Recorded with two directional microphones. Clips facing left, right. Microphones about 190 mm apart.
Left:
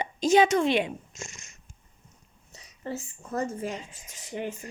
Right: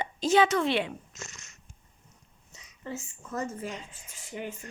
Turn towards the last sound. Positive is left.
turn(degrees=40)  # may be behind; listen again after turning